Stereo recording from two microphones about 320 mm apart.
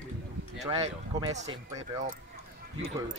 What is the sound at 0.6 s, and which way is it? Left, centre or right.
Speech, centre.